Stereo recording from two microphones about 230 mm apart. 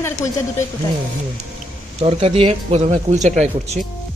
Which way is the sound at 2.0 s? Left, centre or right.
Right.